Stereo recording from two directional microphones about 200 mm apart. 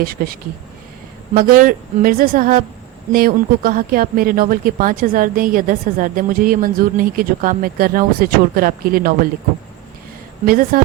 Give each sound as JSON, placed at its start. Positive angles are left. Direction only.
{"t": 0.0, "sound": "speech", "side_deg": -45}
{"t": 10.4, "sound": "speech", "side_deg": -45}